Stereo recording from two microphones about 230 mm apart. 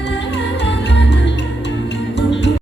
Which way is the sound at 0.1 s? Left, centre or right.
Left.